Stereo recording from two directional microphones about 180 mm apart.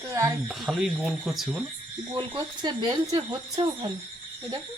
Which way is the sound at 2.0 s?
25° right (ahead or behind).